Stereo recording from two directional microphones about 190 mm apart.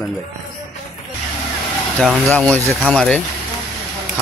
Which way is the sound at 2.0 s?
Centre (ahead or behind).